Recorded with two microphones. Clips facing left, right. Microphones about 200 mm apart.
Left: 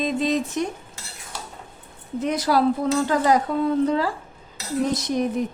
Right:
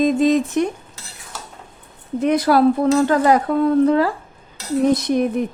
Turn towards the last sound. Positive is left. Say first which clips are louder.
# right 5 dB
turn(degrees=-60)  # may be behind; listen again after turning